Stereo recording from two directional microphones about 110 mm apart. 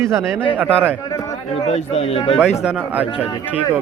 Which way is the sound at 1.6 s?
75° left (ahead or behind).